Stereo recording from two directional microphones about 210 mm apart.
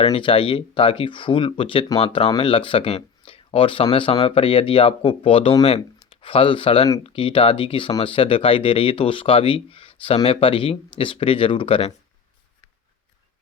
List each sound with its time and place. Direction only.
0.0 s speech: 25° left (ahead or behind)